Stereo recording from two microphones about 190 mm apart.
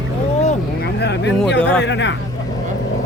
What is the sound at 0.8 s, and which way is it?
Speech, 60° left (ahead or behind).